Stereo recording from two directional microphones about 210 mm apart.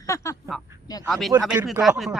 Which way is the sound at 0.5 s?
Centre (ahead or behind).